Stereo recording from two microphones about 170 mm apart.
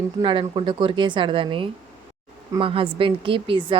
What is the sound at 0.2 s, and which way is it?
Speech, 30° right (ahead or behind).